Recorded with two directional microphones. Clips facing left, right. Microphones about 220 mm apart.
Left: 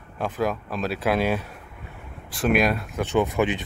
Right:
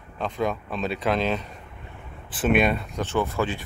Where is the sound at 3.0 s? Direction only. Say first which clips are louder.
Left 4 dB; 15° left (ahead or behind).